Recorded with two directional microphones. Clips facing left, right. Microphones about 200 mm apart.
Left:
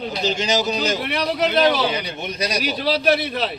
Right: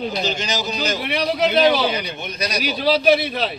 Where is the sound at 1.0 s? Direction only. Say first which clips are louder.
Right 1 dB; 5° right (ahead or behind).